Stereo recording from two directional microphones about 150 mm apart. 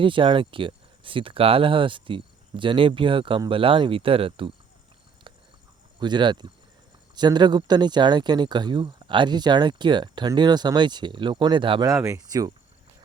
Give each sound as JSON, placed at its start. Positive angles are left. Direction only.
{"t": 0.0, "sound": "speech", "side_deg": -35}
{"t": 5.3, "sound": "a sound", "side_deg": -35}
{"t": 6.0, "sound": "speech", "side_deg": -30}
{"t": 11.9, "sound": "speech", "side_deg": -20}